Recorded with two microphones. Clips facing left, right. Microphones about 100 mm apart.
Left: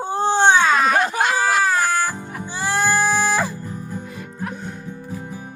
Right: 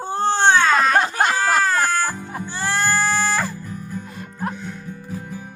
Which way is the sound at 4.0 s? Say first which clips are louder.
Right 1 dB; 40° right (ahead or behind).